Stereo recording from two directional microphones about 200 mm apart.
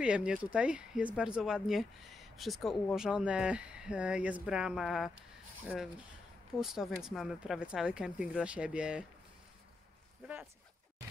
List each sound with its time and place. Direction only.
0.0 s speech: 5° right (ahead or behind)
6.6 s speech: centre (ahead or behind)